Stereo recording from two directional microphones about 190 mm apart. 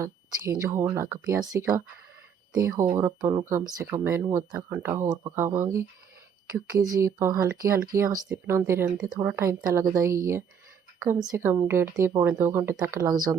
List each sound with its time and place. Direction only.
0.0 s speech: 15° right (ahead or behind)